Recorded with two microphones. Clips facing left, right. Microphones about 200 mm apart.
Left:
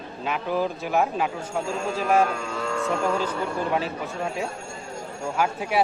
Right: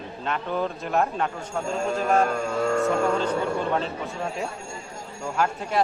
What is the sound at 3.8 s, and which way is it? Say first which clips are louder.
A man's voice: left 1 dB; 5° left (ahead or behind).